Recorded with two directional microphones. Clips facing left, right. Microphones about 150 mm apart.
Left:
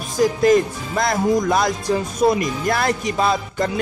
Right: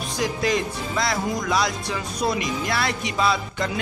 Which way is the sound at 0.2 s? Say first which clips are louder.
Left 9 dB; 45° left (ahead or behind).